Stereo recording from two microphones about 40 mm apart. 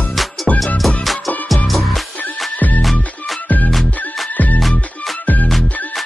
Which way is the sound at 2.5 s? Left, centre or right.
Left.